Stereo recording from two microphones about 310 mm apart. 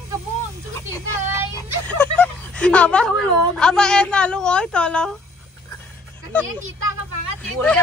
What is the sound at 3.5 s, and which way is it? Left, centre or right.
Speech, centre.